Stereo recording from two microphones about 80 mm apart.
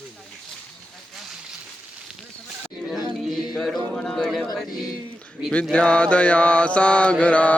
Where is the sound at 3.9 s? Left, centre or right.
Centre.